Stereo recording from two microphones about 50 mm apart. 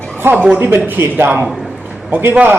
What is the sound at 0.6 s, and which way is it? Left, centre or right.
Speech, right.